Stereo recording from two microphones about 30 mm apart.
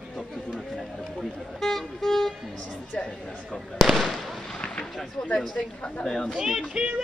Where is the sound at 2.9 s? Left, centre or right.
Left.